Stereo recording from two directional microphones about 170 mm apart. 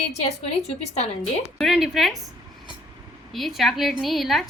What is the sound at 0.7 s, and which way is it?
Speech, 40° left (ahead or behind).